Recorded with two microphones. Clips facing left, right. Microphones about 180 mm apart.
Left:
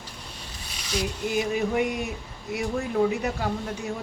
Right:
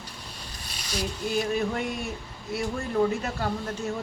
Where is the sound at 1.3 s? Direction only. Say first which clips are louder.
Left 1 dB; 15° left (ahead or behind).